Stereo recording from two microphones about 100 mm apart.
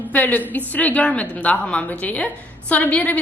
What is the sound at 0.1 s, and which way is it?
A woman's voice, 15° left (ahead or behind).